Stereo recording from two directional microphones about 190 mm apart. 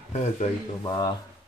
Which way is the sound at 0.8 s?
20° left (ahead or behind).